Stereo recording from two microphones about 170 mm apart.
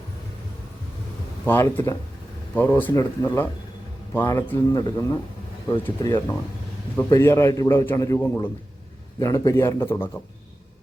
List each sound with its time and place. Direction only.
1.5 s a man's voice: 10° left (ahead or behind)
4.5 s a man's voice: 25° left (ahead or behind)